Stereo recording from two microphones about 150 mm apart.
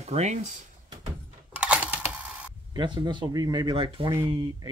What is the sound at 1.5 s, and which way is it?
Mechanisms, 10° right (ahead or behind).